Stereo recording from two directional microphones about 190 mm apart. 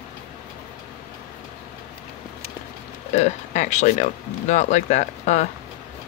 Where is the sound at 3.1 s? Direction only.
35° left (ahead or behind).